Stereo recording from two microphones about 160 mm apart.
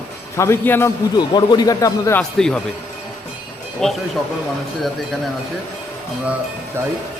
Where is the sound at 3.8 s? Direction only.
Centre (ahead or behind).